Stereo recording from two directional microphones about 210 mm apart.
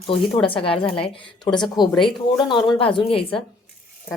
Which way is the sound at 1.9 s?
Centre (ahead or behind).